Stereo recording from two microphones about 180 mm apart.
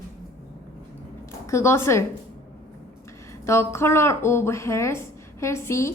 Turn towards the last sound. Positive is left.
turn(degrees=15)  # may be behind; listen again after turning